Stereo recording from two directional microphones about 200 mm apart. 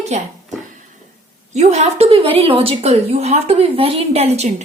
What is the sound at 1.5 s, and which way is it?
A woman's voice, 35° right (ahead or behind).